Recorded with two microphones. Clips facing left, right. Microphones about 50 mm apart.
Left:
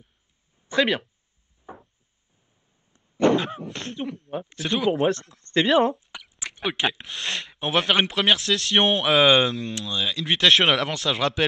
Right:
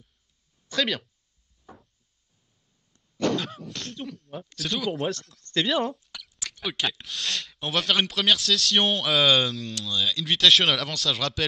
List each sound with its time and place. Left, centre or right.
0.7 s speech: left
1.7 s a sound: left
2.9 s speech: left